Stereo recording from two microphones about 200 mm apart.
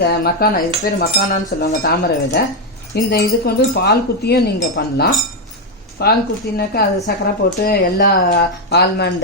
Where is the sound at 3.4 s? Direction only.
55° left (ahead or behind).